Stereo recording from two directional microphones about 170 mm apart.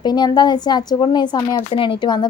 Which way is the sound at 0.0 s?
25° left (ahead or behind).